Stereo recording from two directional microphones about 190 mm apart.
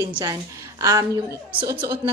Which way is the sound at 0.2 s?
15° right (ahead or behind).